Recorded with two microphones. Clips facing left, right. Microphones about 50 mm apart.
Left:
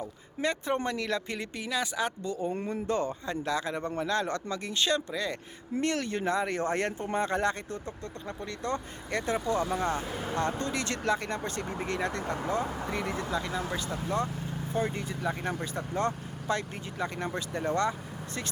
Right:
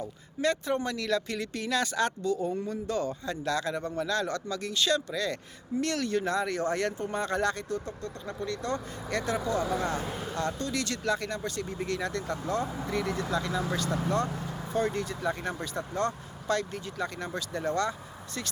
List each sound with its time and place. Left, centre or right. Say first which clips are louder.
0.4 s speech: right 1 dB; left
1.6 s speech: right 3 dB; centre
2.2 s speech: right 2 dB; left